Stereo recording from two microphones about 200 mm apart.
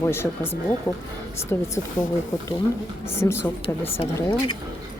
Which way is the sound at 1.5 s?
10° left (ahead or behind).